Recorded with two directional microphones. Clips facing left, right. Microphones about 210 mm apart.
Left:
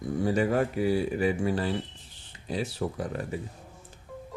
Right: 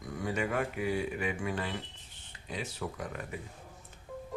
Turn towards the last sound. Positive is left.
turn(degrees=35)  # may be behind; listen again after turning